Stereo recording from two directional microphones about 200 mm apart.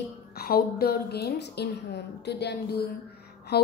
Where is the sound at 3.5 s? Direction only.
55° left (ahead or behind).